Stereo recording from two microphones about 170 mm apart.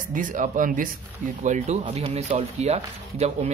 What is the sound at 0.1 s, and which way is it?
Speech, 50° right (ahead or behind).